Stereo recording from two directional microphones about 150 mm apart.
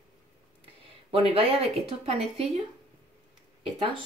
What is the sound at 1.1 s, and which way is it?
Speech, 40° right (ahead or behind).